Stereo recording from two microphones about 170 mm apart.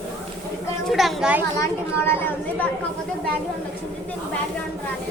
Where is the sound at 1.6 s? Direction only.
15° left (ahead or behind).